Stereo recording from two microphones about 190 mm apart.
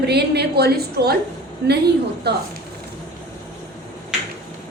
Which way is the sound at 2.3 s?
60° right (ahead or behind).